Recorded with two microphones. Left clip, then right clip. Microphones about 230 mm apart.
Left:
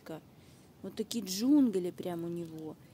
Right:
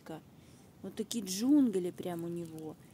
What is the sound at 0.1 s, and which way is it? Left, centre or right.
A woman's voice, centre.